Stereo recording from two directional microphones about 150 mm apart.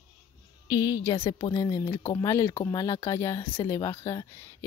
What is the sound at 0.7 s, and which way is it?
Speech, 25° left (ahead or behind).